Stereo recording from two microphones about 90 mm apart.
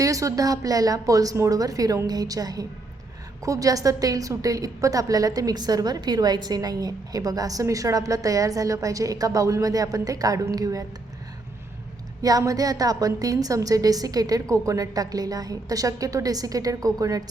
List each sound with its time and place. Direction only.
0.0 s a woman's voice: 40° right (ahead or behind)
12.2 s a woman's voice: 40° right (ahead or behind)